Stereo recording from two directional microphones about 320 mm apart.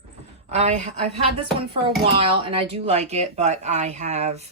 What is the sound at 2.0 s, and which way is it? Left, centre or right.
Speech, centre.